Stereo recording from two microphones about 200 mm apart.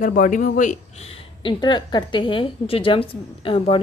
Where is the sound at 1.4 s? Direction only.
25° left (ahead or behind).